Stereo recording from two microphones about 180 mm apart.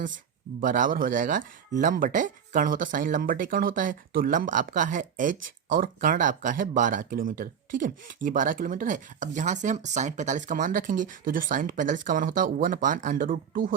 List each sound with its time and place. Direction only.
0.6 s speech: 45° right (ahead or behind)